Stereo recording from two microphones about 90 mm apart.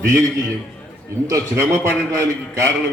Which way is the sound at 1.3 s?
35° right (ahead or behind).